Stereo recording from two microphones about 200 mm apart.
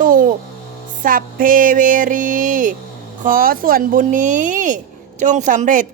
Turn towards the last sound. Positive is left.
turn(degrees=-40)  # may be behind; listen again after turning